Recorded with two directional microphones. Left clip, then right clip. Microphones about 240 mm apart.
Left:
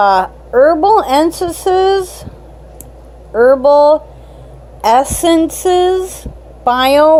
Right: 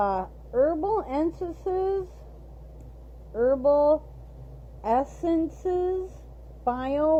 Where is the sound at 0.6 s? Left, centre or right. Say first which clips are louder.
Left 16 dB; left.